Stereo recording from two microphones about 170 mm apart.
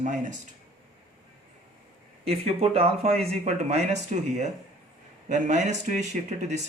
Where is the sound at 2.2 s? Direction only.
35° right (ahead or behind).